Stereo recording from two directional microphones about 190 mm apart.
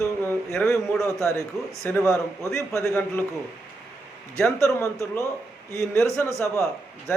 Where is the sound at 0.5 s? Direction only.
10° left (ahead or behind).